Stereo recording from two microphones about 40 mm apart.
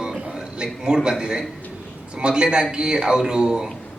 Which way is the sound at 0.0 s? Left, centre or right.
Centre.